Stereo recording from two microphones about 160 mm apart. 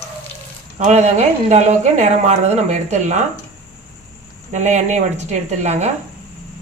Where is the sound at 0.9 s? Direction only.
45° right (ahead or behind).